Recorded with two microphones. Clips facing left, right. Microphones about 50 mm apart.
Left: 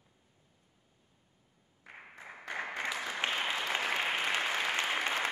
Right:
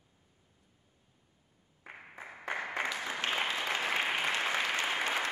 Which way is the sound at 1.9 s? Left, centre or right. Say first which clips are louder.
Right 2 dB; centre.